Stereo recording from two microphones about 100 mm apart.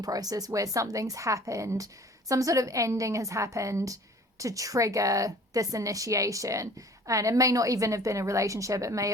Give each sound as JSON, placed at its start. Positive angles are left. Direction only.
{"t": 0.0, "sound": "a woman's voice", "side_deg": -40}